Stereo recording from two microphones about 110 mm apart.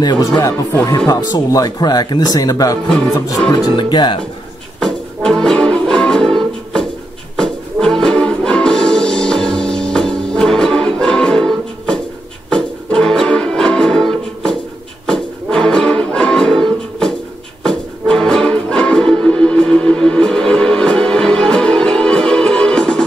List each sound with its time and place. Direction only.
0.0 s speech: 40° left (ahead or behind)
4.7 s music: 5° left (ahead or behind)